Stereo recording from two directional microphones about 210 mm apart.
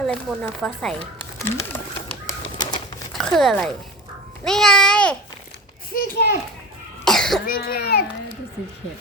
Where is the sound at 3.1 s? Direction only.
Centre (ahead or behind).